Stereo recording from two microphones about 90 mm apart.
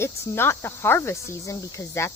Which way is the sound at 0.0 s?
25° left (ahead or behind).